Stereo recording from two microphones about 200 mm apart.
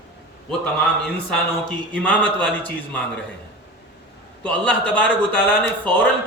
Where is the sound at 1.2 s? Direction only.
5° left (ahead or behind).